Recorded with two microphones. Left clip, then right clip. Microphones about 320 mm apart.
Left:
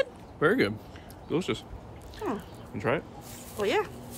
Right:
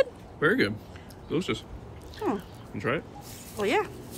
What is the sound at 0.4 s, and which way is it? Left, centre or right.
Speech, left.